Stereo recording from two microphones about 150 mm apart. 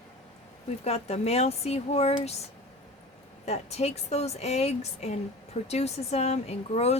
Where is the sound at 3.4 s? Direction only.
45° left (ahead or behind).